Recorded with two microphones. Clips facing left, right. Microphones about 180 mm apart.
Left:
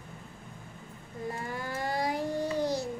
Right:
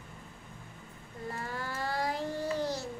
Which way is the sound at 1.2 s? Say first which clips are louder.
Left 2 dB; 15° left (ahead or behind).